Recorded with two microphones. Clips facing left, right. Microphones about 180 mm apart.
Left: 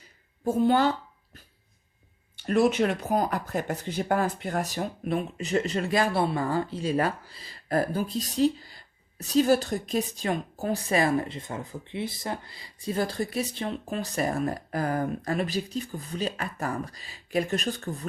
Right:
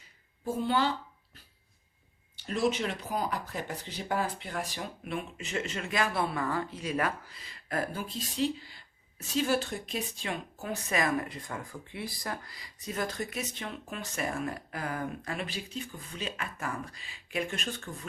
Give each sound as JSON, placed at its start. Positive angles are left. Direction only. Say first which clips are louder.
{"t": 0.4, "sound": "a woman's voice", "louder": "left 7 dB", "side_deg": 45}
{"t": 2.3, "sound": "speech", "louder": "left 7 dB", "side_deg": 55}